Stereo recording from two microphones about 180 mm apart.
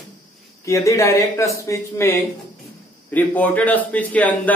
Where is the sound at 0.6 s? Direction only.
15° left (ahead or behind).